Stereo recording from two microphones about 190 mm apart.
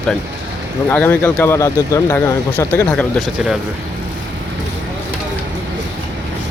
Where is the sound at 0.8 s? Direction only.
10° left (ahead or behind).